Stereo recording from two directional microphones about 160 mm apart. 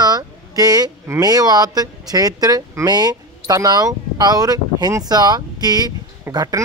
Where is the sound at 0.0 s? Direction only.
25° right (ahead or behind).